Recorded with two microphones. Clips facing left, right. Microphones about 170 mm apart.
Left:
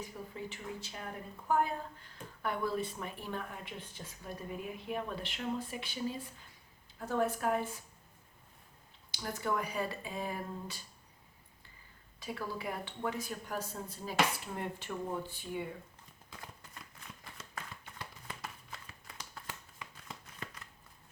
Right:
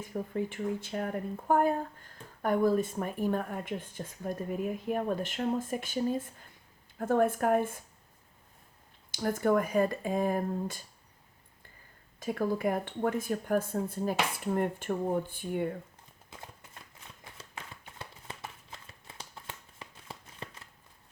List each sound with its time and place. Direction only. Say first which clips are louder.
0.0 s speech: right 9 dB; 50° right (ahead or behind)
9.1 s speech: right 9 dB; 50° right (ahead or behind)
12.2 s speech: right 10 dB; 50° right (ahead or behind)
18.3 s shuffling cards: right 1 dB; 25° right (ahead or behind)